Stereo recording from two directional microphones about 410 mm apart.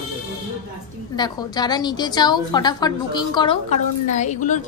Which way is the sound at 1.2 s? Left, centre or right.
Centre.